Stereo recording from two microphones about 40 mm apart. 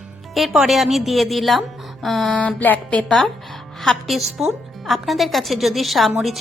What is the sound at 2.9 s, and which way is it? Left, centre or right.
Speech, left.